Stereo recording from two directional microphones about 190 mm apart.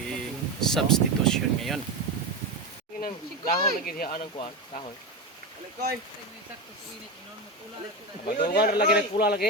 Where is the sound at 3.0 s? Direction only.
50° left (ahead or behind).